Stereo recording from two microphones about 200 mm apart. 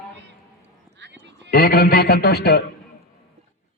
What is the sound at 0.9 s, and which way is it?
Sheep, 60° right (ahead or behind).